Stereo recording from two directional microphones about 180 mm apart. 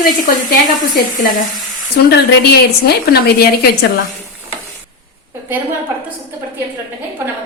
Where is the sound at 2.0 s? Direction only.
65° left (ahead or behind).